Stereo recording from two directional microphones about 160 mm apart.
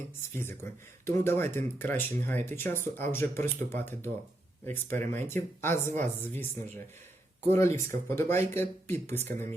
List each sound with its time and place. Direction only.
0.3 s speech: 15° left (ahead or behind)